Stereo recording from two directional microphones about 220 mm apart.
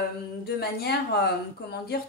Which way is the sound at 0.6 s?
45° left (ahead or behind).